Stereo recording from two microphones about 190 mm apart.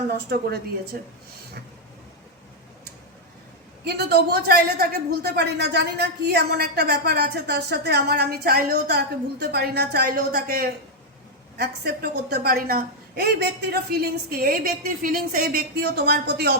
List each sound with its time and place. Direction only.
0.1 s a man's voice: 60° right (ahead or behind)
3.8 s a man's voice: 60° right (ahead or behind)